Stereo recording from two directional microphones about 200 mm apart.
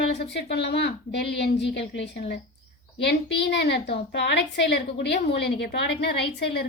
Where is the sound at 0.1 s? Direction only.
55° left (ahead or behind).